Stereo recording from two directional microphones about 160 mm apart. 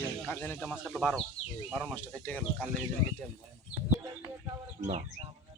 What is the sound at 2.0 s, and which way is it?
Speech, 10° left (ahead or behind).